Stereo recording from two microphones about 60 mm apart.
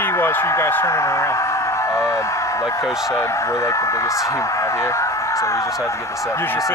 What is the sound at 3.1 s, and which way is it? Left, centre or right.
Speech, left.